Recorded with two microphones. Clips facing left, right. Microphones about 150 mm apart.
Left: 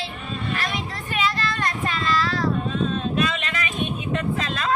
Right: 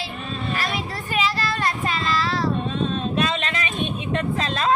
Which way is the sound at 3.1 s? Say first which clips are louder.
Right 1 dB; 30° right (ahead or behind).